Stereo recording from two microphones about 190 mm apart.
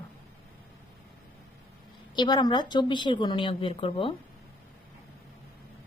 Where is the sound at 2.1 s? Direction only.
25° left (ahead or behind).